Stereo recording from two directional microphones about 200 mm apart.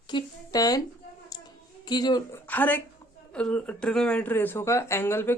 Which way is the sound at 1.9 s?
20° left (ahead or behind).